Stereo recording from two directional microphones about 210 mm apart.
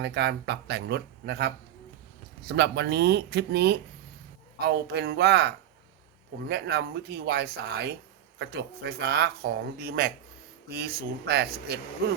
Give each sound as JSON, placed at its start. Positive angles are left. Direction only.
{"t": 0.0, "sound": "speech", "side_deg": -55}